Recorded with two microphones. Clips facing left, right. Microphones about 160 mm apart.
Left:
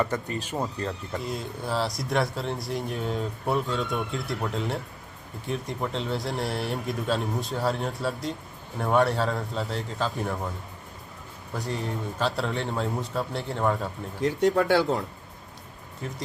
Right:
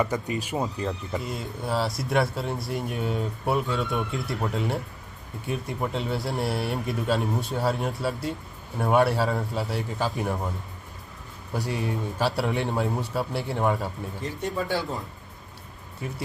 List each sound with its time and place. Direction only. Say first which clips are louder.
0.0 s a man's voice: right 1 dB; 10° right (ahead or behind)
11.7 s a man's voice: right 1 dB; 10° right (ahead or behind)
14.2 s speech: left 8 dB; 75° left (ahead or behind)